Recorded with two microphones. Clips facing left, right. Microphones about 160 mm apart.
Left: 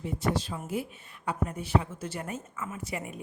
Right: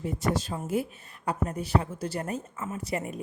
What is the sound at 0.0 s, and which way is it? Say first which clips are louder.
A woman's voice: right 1 dB; 45° right (ahead or behind).